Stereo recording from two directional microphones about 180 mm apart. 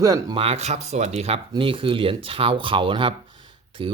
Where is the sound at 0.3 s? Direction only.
35° right (ahead or behind).